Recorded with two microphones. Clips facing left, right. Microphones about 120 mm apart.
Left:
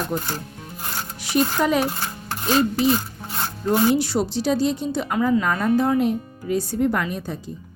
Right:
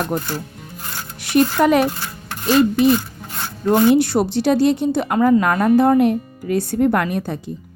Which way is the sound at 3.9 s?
60° right (ahead or behind).